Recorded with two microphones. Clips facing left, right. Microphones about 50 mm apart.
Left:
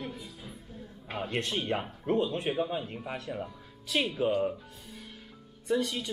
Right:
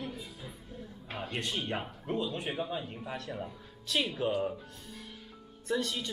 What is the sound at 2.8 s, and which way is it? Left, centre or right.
Speech, left.